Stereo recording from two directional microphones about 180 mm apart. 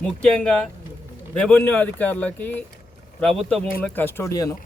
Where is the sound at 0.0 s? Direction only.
5° left (ahead or behind).